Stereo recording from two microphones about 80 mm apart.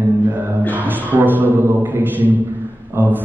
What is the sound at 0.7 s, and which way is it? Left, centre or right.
A man's voice, right.